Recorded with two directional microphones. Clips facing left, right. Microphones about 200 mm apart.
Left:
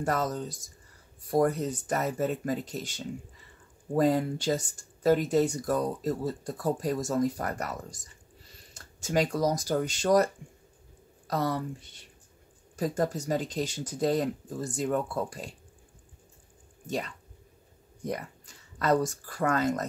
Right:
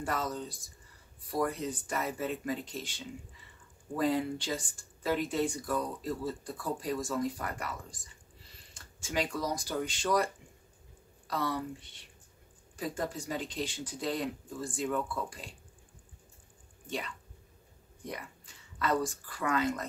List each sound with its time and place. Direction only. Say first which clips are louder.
0.0 s speech: left 5 dB; 45° left (ahead or behind)
16.8 s speech: left 5 dB; 40° left (ahead or behind)